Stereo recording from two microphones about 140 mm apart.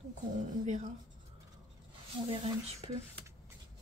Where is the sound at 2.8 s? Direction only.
45° right (ahead or behind).